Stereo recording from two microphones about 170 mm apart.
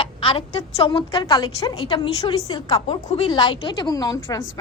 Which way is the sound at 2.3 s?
20° left (ahead or behind).